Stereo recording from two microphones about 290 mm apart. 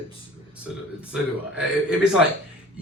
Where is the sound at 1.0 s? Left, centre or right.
Centre.